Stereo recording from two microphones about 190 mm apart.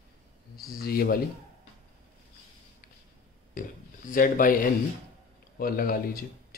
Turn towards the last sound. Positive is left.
turn(degrees=50)  # may be behind; listen again after turning